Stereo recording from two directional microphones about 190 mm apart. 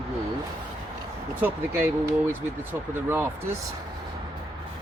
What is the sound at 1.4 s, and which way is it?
Speech, 10° right (ahead or behind).